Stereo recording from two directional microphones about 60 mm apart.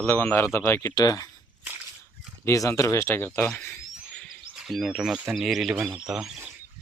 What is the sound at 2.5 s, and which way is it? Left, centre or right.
Speech, left.